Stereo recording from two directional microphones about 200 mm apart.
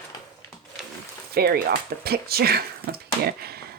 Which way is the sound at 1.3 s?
50° right (ahead or behind).